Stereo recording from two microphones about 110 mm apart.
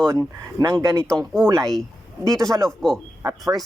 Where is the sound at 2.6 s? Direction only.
5° left (ahead or behind).